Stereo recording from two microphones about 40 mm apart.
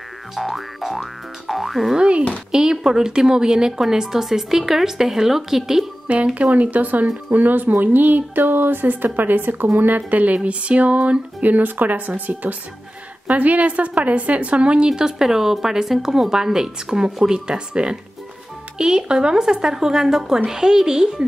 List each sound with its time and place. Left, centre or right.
0.4 s boing: centre
2.0 s speech: right
2.5 s a woman's voice: centre
6.3 s a woman's voice: right
11.4 s a woman's voice: right
14.9 s a woman's voice: centre